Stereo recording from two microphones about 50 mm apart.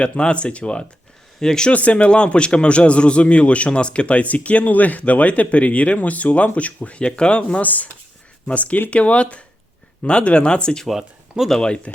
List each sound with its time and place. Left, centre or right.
0.0 s speech: left
1.7 s speech: left
7.6 s speech: left; by 10.8 s centre
10.8 s speech: centre
11.4 s speech: centre